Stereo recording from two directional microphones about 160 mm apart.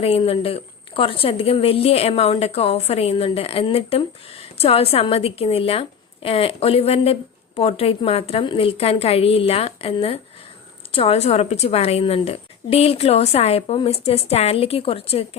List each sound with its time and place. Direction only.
0.0 s a woman's voice: 40° left (ahead or behind)